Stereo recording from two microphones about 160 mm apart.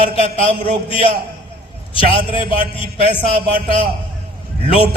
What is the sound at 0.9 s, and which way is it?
A man's voice, 35° left (ahead or behind).